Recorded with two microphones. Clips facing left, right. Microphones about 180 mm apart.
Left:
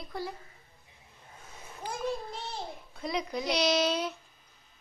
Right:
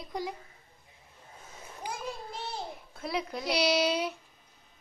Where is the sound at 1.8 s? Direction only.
15° right (ahead or behind).